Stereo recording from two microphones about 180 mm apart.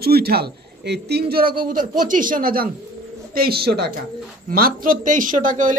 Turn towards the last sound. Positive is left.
turn(degrees=-45)  # may be behind; listen again after turning